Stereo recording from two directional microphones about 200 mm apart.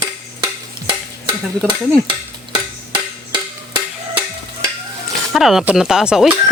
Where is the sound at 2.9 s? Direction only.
25° right (ahead or behind).